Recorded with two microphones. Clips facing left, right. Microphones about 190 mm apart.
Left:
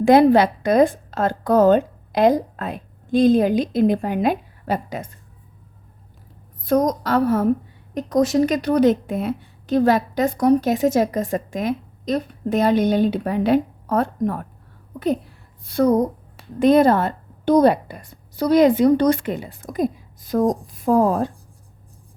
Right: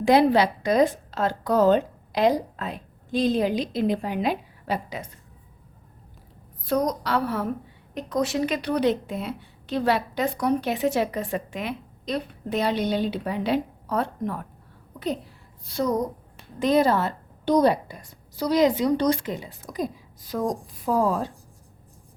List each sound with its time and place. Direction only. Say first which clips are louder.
0.0 s a woman's voice: left 5 dB; 50° left (ahead or behind)
6.7 s a woman's voice: left 5 dB; 45° left (ahead or behind)